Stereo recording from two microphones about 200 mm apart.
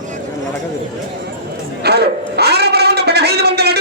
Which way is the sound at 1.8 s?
55° right (ahead or behind).